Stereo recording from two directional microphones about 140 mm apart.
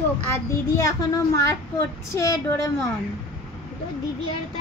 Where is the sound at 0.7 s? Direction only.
20° left (ahead or behind).